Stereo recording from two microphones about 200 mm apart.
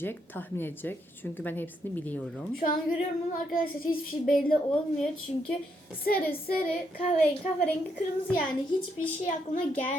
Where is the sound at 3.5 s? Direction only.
45° left (ahead or behind).